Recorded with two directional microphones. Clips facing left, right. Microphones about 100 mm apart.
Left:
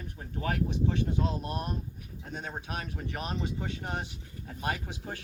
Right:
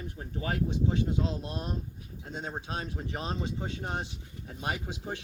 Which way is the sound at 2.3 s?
25° right (ahead or behind).